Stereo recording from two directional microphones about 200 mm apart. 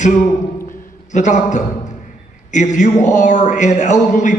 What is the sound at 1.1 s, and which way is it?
A man's voice, 35° left (ahead or behind).